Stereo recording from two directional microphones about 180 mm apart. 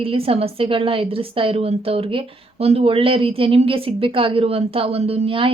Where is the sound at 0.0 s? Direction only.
30° right (ahead or behind).